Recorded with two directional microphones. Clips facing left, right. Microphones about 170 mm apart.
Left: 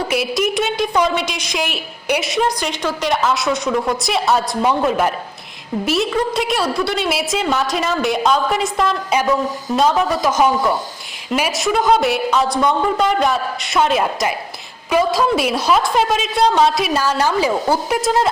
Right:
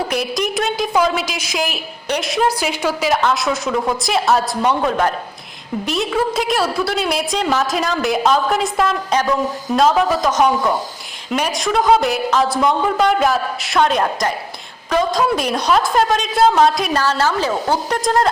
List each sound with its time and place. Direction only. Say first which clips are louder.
0.1 s a woman's voice: left 2 dB; 5° left (ahead or behind)